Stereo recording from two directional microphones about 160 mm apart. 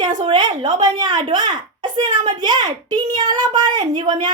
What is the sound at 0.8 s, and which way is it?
A child's voice, 25° right (ahead or behind).